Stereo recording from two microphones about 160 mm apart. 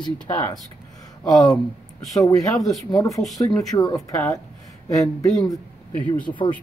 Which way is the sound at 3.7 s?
20° left (ahead or behind).